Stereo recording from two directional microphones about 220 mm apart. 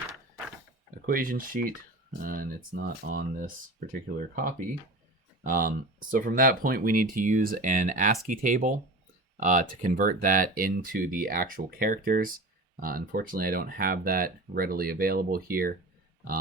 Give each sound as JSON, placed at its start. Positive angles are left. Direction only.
{"t": 1.0, "sound": "speech", "side_deg": -40}